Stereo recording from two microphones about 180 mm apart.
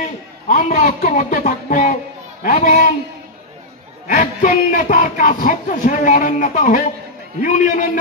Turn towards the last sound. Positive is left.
turn(degrees=45)  # may be behind; listen again after turning